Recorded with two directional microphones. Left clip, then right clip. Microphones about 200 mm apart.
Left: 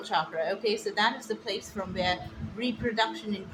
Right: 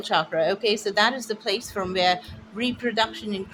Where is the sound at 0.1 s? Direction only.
55° right (ahead or behind).